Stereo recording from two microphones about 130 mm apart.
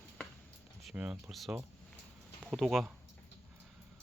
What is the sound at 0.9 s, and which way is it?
Speech, 5° right (ahead or behind).